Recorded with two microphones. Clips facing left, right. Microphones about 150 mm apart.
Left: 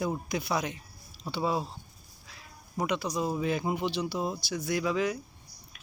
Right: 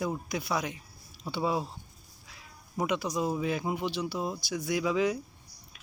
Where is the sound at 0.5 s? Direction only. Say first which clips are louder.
Left 1 dB; 5° right (ahead or behind).